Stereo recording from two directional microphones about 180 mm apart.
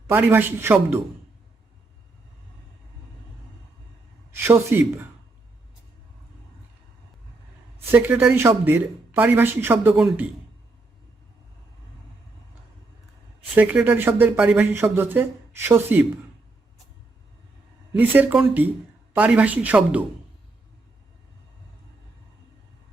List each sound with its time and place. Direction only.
0.1 s speech: 10° right (ahead or behind)
4.4 s speech: 10° right (ahead or behind)
7.9 s speech: 10° right (ahead or behind)
13.6 s speech: 10° right (ahead or behind)
17.9 s speech: 10° right (ahead or behind)